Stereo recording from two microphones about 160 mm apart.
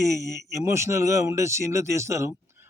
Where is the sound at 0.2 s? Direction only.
15° right (ahead or behind).